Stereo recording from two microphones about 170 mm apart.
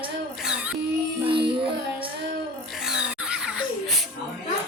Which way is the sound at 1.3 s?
30° right (ahead or behind).